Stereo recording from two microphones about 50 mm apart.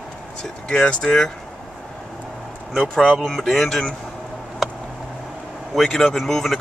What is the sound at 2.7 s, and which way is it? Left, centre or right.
Speech, centre.